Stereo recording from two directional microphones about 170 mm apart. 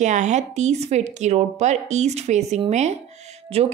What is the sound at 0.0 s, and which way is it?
A woman's voice, 45° right (ahead or behind).